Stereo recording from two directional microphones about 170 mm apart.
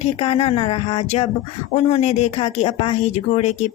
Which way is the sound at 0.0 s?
35° left (ahead or behind).